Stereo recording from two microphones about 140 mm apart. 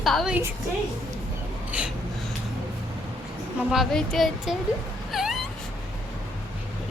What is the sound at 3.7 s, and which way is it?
Speech, centre (ahead or behind).